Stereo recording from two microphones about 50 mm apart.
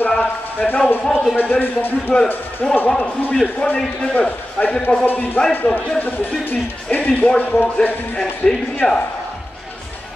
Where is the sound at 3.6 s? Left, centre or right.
Left.